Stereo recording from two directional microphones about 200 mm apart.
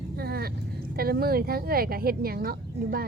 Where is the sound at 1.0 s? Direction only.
50° right (ahead or behind).